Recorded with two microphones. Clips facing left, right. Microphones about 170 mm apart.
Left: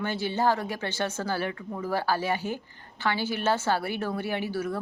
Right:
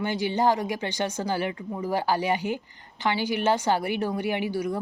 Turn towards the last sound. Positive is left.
turn(degrees=-15)  # may be behind; listen again after turning